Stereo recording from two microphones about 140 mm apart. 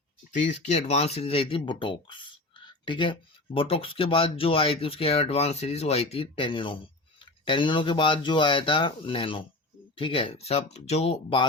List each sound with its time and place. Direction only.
0.3 s speech: 55° left (ahead or behind)